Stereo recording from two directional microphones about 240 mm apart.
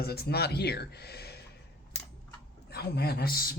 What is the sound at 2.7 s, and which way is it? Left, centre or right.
Speech, left.